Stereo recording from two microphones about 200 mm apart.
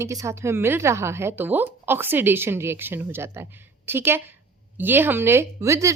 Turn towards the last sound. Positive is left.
turn(degrees=-15)  # may be behind; listen again after turning